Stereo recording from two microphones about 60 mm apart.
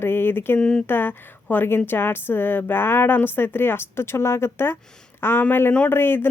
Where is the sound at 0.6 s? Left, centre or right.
Centre.